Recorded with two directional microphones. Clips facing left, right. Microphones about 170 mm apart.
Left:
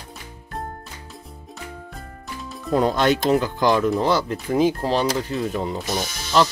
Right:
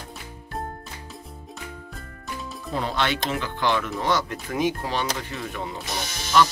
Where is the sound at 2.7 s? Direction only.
45° left (ahead or behind).